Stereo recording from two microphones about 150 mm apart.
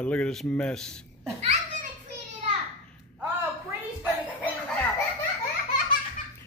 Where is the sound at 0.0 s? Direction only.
5° left (ahead or behind).